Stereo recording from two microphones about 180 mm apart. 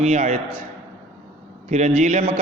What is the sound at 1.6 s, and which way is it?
Speech, 40° right (ahead or behind).